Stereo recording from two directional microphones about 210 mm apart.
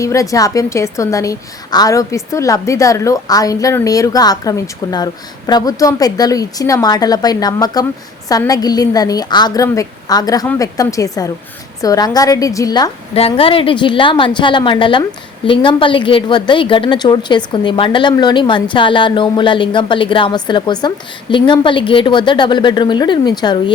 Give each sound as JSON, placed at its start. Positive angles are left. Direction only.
{"t": 0.0, "sound": "a woman's voice", "side_deg": 15}